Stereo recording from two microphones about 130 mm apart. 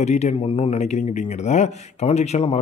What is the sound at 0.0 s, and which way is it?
Speech, 60° left (ahead or behind).